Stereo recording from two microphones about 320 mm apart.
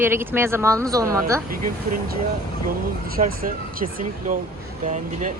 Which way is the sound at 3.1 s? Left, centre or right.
Right.